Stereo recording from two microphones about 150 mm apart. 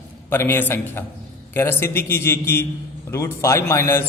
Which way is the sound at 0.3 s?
15° left (ahead or behind).